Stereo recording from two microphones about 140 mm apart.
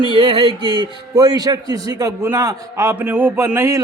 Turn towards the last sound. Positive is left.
turn(degrees=-20)  # may be behind; listen again after turning